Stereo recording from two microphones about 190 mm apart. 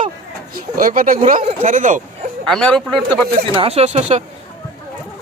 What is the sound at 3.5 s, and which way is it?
Speech, 30° right (ahead or behind).